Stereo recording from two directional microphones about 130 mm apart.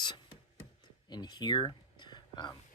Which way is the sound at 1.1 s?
30° left (ahead or behind).